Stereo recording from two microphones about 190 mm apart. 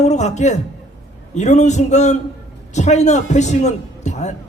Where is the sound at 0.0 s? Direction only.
35° left (ahead or behind).